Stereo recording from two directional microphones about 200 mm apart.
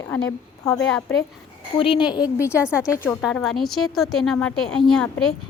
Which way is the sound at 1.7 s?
25° left (ahead or behind).